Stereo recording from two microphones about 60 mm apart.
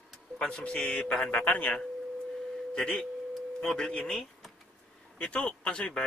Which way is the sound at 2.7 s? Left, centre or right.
Centre.